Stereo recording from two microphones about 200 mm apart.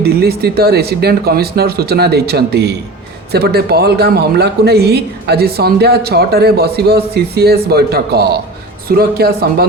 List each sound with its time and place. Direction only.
0.0 s speech: 50° right (ahead or behind)